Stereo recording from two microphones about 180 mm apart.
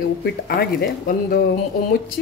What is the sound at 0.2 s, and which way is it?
Speech, 60° left (ahead or behind).